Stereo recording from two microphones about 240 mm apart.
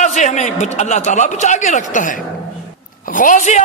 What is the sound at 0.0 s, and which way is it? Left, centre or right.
A man's voice, left.